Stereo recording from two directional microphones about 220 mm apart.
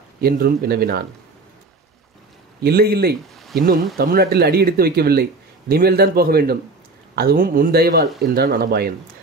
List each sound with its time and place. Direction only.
0.2 s speech: 45° right (ahead or behind)
2.6 s speech: 45° right (ahead or behind)
3.3 s a sound: centre (ahead or behind)
3.6 s speech: 40° right (ahead or behind)